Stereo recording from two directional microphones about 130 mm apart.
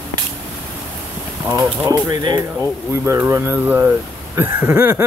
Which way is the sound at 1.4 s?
20° right (ahead or behind).